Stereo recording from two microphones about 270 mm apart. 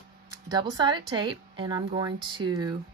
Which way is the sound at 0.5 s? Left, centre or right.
Centre.